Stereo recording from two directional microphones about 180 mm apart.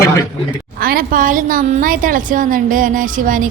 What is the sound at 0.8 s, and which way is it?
A woman's voice, 55° right (ahead or behind).